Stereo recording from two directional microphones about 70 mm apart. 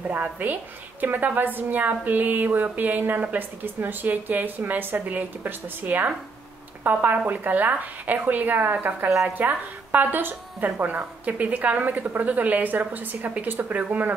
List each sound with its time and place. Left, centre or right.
0.1 s a woman's voice: right